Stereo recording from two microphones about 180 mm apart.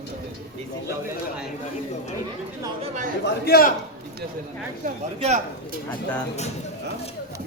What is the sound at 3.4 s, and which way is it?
Speech, 55° left (ahead or behind).